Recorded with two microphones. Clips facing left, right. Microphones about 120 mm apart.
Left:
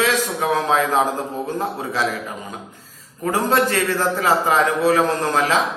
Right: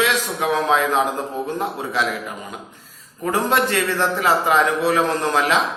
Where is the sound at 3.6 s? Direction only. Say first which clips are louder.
Even; 35° left (ahead or behind).